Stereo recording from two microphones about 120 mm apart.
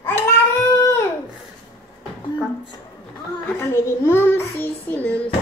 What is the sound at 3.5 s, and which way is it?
Child singing, 20° left (ahead or behind).